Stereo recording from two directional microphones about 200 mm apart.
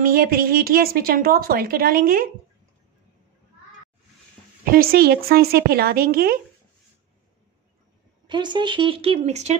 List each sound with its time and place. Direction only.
0.0 s a woman's voice: 45° right (ahead or behind)
4.6 s a woman's voice: 50° right (ahead or behind)
8.3 s speech: 20° right (ahead or behind)